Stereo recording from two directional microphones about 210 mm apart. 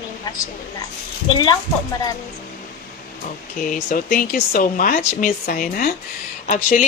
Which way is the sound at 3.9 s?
40° left (ahead or behind).